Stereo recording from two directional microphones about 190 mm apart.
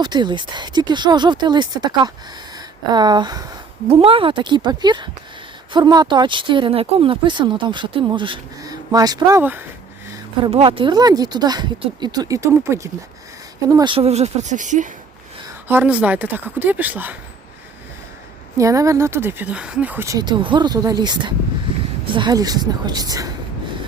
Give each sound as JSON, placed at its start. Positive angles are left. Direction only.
{"t": 0.0, "sound": "speech", "side_deg": -25}
{"t": 10.5, "sound": "speech", "side_deg": -25}
{"t": 13.7, "sound": "speech", "side_deg": -25}
{"t": 15.6, "sound": "speech", "side_deg": -10}
{"t": 18.5, "sound": "speech", "side_deg": -15}